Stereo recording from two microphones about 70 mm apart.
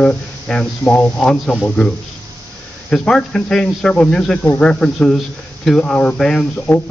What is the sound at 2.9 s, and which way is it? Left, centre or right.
Speech, centre.